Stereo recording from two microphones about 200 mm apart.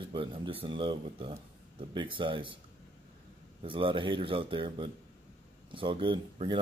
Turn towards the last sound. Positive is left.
turn(degrees=-25)  # may be behind; listen again after turning